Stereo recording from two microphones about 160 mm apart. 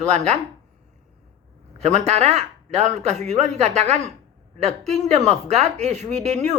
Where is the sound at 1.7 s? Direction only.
45° right (ahead or behind).